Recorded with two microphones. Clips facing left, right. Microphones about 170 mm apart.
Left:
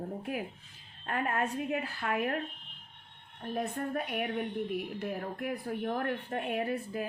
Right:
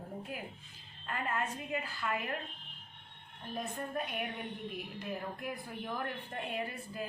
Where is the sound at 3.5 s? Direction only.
65° left (ahead or behind).